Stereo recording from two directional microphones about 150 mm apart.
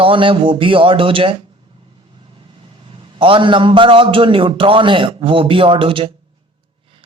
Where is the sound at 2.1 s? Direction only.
35° right (ahead or behind).